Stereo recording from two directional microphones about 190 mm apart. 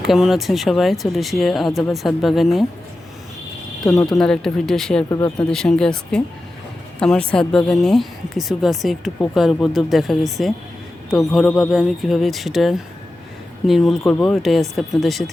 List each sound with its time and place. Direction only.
0.0 s speech: centre (ahead or behind)
3.8 s speech: 15° left (ahead or behind)
4.2 s speech: 5° left (ahead or behind)